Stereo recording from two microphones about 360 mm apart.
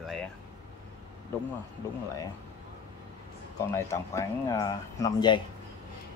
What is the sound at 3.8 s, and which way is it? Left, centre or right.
Speech, centre.